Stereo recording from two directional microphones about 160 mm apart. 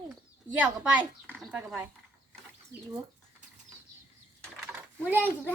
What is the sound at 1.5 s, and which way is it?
Speech, 10° right (ahead or behind).